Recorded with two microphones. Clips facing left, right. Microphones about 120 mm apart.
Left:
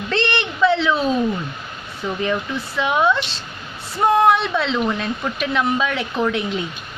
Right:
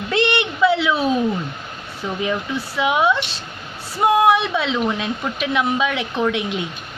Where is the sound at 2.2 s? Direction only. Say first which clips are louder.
Even; 5° right (ahead or behind).